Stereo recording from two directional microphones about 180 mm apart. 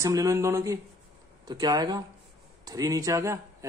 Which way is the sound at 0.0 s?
15° right (ahead or behind).